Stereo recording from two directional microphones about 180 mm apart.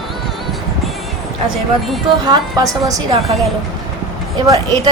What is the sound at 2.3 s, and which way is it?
Speech, 20° right (ahead or behind).